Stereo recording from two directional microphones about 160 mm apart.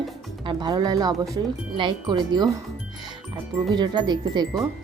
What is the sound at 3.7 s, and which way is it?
Speech, 25° right (ahead or behind).